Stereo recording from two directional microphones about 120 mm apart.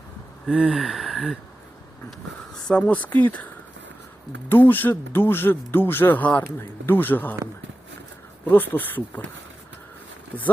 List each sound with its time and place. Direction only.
0.4 s gasp: 5° right (ahead or behind)
2.6 s speech: 5° left (ahead or behind)
8.4 s speech: 15° left (ahead or behind)
10.3 s speech: 15° left (ahead or behind)